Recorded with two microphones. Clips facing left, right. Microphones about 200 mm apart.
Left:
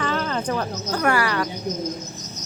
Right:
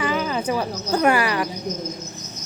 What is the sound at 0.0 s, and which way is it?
Cricket, 10° right (ahead or behind).